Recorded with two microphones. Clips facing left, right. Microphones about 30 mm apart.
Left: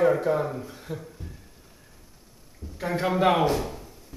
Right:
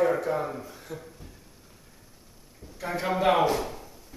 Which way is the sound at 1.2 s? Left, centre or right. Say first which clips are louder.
Left 5 dB; centre.